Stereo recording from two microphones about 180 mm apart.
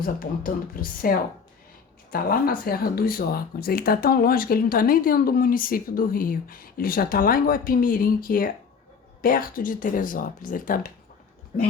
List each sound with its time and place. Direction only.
0.0 s speech: 55° left (ahead or behind)